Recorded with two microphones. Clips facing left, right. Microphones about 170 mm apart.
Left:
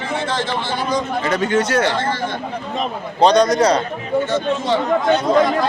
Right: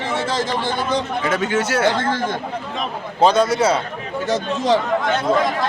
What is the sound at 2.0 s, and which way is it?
Speech, 50° right (ahead or behind).